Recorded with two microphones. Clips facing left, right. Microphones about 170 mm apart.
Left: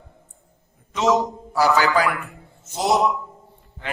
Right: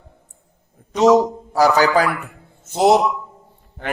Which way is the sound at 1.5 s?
40° right (ahead or behind).